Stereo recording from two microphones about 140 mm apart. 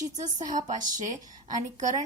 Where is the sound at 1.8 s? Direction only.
60° right (ahead or behind).